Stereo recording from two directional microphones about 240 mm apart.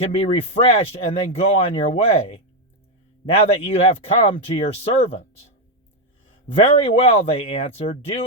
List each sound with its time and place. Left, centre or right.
0.0 s speech: left
6.8 s speech: left